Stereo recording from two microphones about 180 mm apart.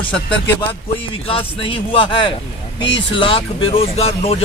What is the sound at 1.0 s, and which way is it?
Speech, 30° left (ahead or behind).